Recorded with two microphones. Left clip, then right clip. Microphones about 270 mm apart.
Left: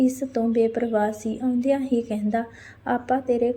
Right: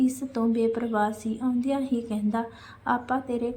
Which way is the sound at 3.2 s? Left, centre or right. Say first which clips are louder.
Left 8 dB; centre.